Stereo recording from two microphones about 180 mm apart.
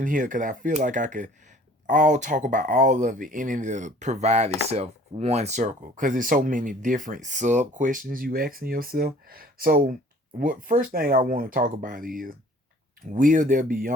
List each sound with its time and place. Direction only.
0.0 s speech: 45° right (ahead or behind)